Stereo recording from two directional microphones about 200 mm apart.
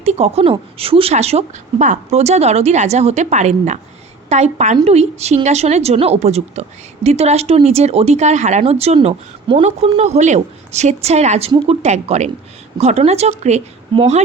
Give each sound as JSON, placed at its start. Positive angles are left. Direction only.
{"t": 0.0, "sound": "a woman's voice", "side_deg": -35}